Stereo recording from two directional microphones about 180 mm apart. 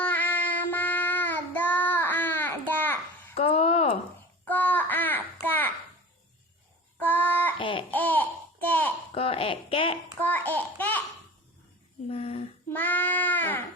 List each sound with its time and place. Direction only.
0.0 s child singing: 10° left (ahead or behind)
3.3 s a sound: 35° left (ahead or behind)
4.4 s child singing: 10° left (ahead or behind)
7.0 s child singing: 10° left (ahead or behind)
7.6 s babbling: 30° left (ahead or behind)
7.9 s babbling: 10° left (ahead or behind)
9.1 s a sound: 30° left (ahead or behind)
10.2 s babbling: 10° left (ahead or behind)
12.0 s a sound: 35° left (ahead or behind)
12.7 s goat: 10° left (ahead or behind)